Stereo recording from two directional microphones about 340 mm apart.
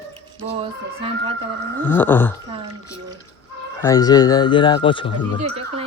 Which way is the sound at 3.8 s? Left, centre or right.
Centre.